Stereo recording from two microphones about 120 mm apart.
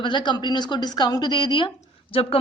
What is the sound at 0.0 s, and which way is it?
A woman's voice, 40° left (ahead or behind).